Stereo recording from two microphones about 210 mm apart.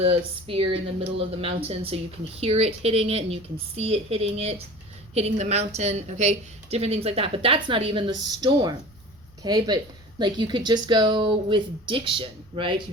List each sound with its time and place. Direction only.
0.0 s a woman's voice: 30° right (ahead or behind)